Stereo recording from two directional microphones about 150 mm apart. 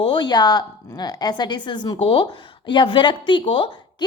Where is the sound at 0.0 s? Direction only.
30° left (ahead or behind).